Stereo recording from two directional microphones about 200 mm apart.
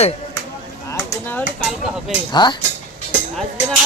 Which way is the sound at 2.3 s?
20° left (ahead or behind).